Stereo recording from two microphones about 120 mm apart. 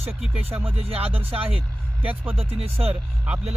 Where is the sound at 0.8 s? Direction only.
55° right (ahead or behind).